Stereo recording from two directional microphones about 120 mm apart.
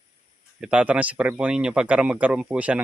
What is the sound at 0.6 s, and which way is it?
Speech, 10° right (ahead or behind).